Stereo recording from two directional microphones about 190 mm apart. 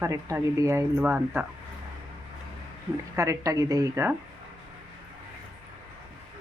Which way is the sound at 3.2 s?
15° right (ahead or behind).